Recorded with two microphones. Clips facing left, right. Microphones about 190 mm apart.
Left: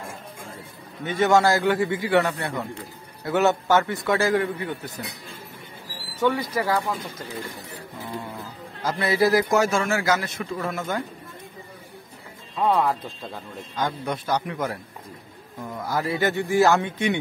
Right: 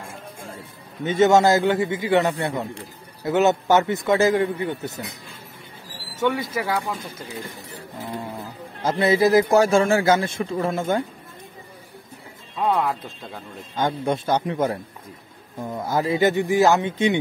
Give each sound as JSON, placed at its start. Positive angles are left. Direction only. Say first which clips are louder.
{"t": 1.0, "sound": "a man's voice", "louder": "right 3 dB", "side_deg": -25}
{"t": 6.5, "sound": "a man's voice", "louder": "left 1 dB", "side_deg": -5}
{"t": 8.8, "sound": "a man's voice", "louder": "right 3 dB", "side_deg": -25}
{"t": 12.6, "sound": "a man's voice", "louder": "left 1 dB", "side_deg": -5}
{"t": 13.7, "sound": "a man's voice", "louder": "right 5 dB", "side_deg": -25}